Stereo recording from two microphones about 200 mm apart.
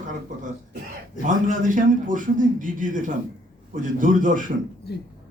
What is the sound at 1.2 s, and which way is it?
A man's voice, 40° right (ahead or behind).